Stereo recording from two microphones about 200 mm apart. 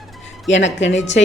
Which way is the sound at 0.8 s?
65° left (ahead or behind).